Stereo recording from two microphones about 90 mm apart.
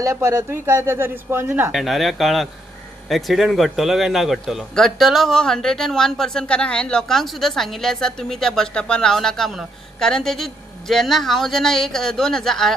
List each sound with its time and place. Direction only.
0.0 s speech: 35° right (ahead or behind)
1.7 s a man's voice: centre (ahead or behind)